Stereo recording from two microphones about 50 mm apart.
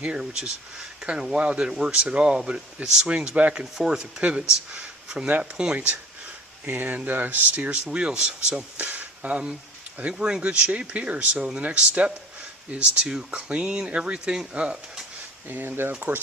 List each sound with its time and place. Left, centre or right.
0.2 s speech: centre
4.2 s speech: right
4.7 s speech: centre
6.7 s speech: right
7.9 s speech: centre
15.4 s speech: right